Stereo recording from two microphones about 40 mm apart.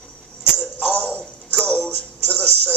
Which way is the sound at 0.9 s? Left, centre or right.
Left.